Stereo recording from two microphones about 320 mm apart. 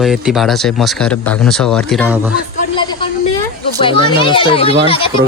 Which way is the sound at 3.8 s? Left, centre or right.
Centre.